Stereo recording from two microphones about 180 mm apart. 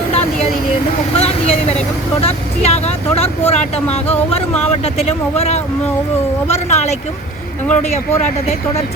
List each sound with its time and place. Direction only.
1.1 s speech: 35° left (ahead or behind)